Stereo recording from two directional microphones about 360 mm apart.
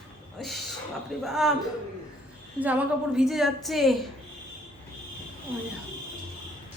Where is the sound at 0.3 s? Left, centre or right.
Centre.